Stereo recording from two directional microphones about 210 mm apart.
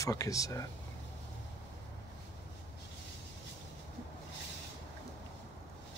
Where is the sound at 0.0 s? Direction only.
15° left (ahead or behind).